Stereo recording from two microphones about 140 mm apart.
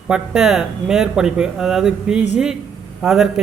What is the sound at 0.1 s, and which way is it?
Speech, 5° right (ahead or behind).